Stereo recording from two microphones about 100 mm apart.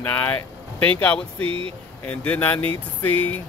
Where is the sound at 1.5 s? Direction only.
65° right (ahead or behind).